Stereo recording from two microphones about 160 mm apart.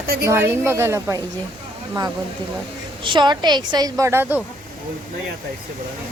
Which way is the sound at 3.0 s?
30° right (ahead or behind).